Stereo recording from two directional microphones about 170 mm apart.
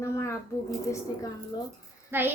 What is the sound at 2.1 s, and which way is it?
Speech, 10° right (ahead or behind).